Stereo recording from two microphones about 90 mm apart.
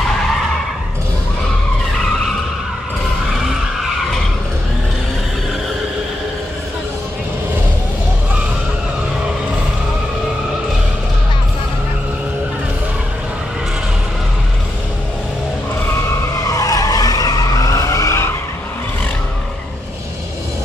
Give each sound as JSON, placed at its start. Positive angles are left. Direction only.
{"t": 16.4, "sound": "vehicle", "side_deg": 40}